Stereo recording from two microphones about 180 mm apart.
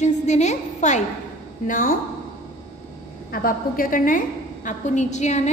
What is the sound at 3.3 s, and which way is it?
A woman's voice, 55° left (ahead or behind).